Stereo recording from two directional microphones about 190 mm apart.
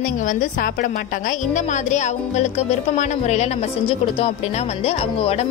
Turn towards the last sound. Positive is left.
turn(degrees=30)  # may be behind; listen again after turning